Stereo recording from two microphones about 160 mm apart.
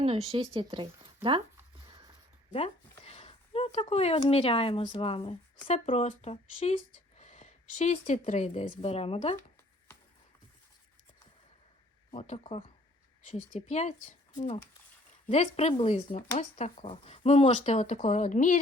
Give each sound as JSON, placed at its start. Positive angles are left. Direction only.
{"t": 0.0, "sound": "speech", "side_deg": -35}
{"t": 3.0, "sound": "speech", "side_deg": 40}
{"t": 12.1, "sound": "speech", "side_deg": 40}
{"t": 13.2, "sound": "speech", "side_deg": 45}
{"t": 14.3, "sound": "speech", "side_deg": 35}